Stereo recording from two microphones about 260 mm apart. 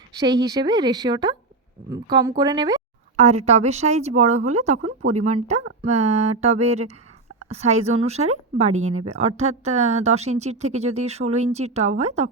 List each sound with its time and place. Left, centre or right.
0.2 s speech: centre
3.2 s speech: right